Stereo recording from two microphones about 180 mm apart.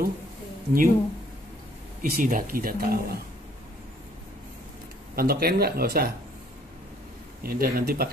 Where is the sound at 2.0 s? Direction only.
50° right (ahead or behind).